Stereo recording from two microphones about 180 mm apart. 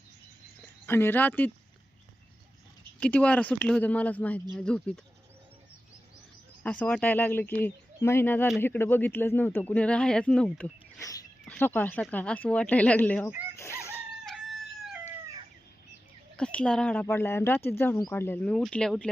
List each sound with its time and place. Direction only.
0.9 s speech: 10° left (ahead or behind)
3.0 s speech: 5° left (ahead or behind)
6.6 s speech: 5° left (ahead or behind)
13.6 s a sound: 15° left (ahead or behind)
16.4 s speech: 5° left (ahead or behind)